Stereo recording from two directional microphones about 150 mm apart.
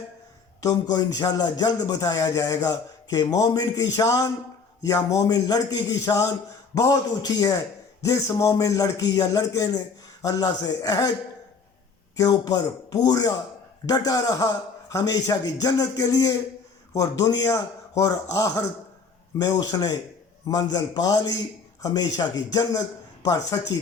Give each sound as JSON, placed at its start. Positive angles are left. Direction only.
{"t": 0.6, "sound": "speech", "side_deg": 25}
{"t": 12.1, "sound": "speech", "side_deg": 25}